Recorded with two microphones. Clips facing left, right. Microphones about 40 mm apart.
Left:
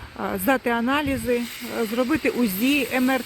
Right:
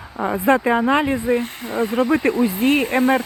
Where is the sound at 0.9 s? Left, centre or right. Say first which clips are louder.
Right 5 dB; right.